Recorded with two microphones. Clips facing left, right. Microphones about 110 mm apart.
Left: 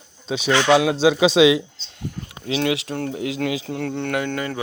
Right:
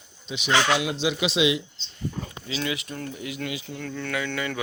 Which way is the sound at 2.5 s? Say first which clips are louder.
Left 9 dB; 70° left (ahead or behind).